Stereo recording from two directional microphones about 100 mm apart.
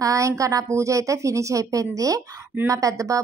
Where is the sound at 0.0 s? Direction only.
30° right (ahead or behind).